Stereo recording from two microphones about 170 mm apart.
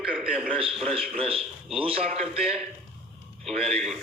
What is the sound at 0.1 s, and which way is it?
Speech, 5° right (ahead or behind).